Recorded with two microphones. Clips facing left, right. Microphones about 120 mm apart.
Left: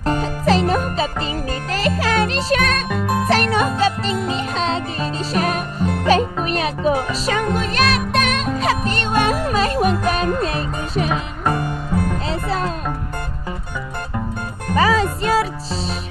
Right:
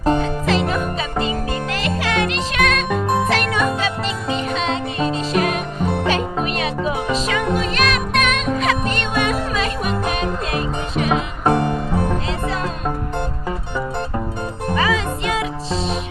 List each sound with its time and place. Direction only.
0.2 s music: 40° left (ahead or behind)
1.7 s music: 40° left (ahead or behind)
14.8 s music: 40° left (ahead or behind)